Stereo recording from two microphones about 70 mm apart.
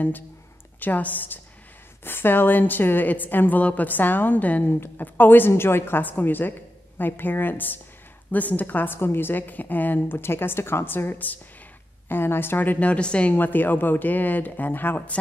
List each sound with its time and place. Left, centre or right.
0.7 s a woman's voice: left
13.3 s a woman's voice: left